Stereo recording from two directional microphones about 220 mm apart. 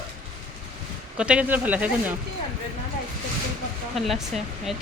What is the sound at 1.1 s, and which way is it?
Speech, 5° right (ahead or behind).